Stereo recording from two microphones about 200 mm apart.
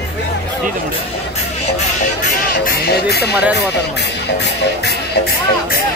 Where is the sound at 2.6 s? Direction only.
50° left (ahead or behind).